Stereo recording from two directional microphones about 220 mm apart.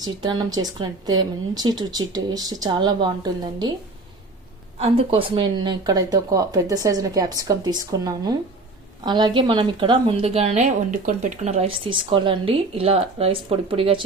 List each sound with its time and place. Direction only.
0.0 s a woman's voice: 20° right (ahead or behind)
4.8 s a woman's voice: 25° right (ahead or behind)